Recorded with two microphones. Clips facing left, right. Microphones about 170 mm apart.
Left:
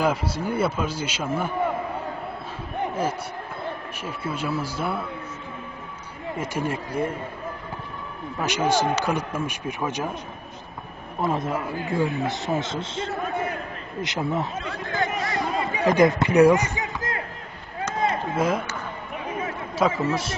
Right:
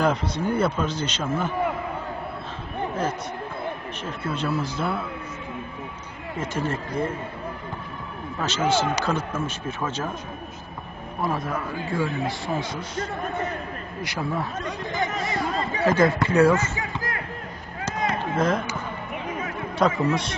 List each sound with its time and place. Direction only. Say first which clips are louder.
0.0 s a man's voice: right 1 dB; 5° left (ahead or behind)
4.0 s a man's voice: right 1 dB; 10° left (ahead or behind)
6.4 s a man's voice: right 1 dB; 10° left (ahead or behind)
8.4 s a man's voice: left 1 dB; 15° left (ahead or behind)
11.1 s a man's voice: left 2 dB; 25° left (ahead or behind)
14.7 s speech: even; 20° right (ahead or behind)
15.5 s speech: left 1 dB; 15° left (ahead or behind)
18.3 s speech: right 3 dB; 10° left (ahead or behind)
19.8 s a man's voice: right 1 dB; 5° left (ahead or behind)